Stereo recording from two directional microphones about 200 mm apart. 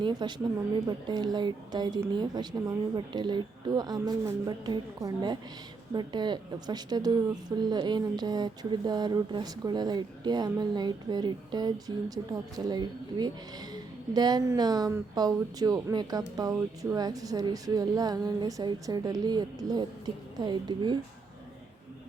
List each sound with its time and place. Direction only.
0.0 s speech: 20° right (ahead or behind)